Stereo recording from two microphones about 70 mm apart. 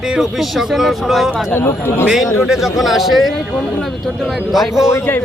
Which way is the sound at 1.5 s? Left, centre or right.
Left.